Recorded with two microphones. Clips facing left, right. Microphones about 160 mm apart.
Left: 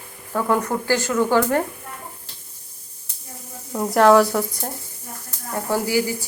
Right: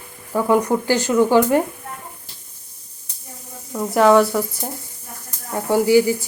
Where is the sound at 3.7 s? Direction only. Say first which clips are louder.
Even; centre (ahead or behind).